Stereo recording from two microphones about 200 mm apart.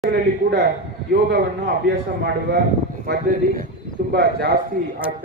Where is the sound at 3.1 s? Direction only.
45° right (ahead or behind).